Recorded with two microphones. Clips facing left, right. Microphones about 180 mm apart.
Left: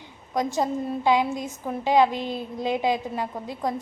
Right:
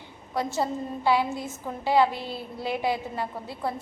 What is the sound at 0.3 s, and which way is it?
A woman's voice, 15° left (ahead or behind).